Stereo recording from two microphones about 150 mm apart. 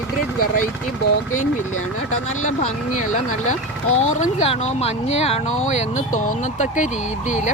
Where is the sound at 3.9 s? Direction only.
45° left (ahead or behind).